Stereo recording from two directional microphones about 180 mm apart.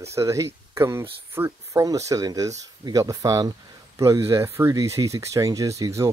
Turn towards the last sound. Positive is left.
turn(degrees=-15)  # may be behind; listen again after turning